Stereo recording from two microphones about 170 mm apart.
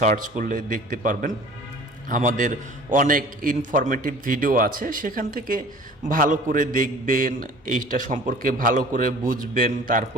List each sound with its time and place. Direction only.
0.0 s a man's voice: 50° right (ahead or behind)